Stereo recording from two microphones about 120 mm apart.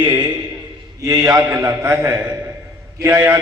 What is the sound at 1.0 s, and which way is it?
A man's voice, 30° right (ahead or behind).